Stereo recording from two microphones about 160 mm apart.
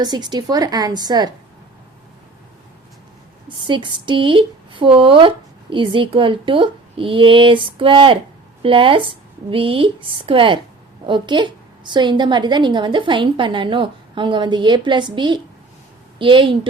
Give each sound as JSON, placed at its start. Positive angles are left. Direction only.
{"t": 0.0, "sound": "a woman's voice", "side_deg": -25}
{"t": 3.5, "sound": "a woman's voice", "side_deg": -30}